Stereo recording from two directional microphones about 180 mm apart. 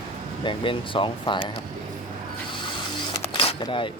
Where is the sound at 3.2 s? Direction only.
30° left (ahead or behind).